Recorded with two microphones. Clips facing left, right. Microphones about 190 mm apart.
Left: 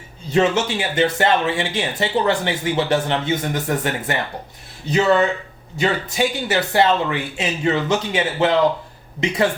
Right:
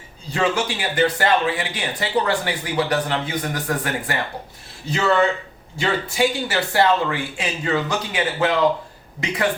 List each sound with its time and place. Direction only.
0.3 s speech: 25° left (ahead or behind)